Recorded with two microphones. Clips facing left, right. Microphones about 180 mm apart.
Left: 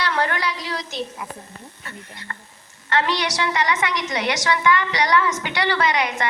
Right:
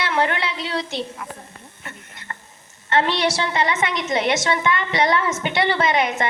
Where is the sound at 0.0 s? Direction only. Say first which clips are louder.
Right 1 dB; 25° right (ahead or behind).